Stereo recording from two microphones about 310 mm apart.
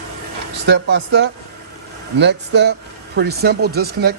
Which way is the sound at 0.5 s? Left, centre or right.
Right.